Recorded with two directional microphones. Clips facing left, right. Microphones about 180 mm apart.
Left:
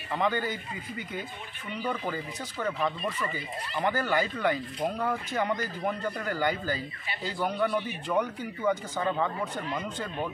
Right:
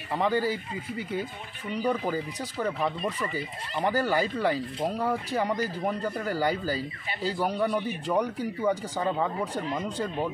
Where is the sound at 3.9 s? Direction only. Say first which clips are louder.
Right 3 dB; 35° right (ahead or behind).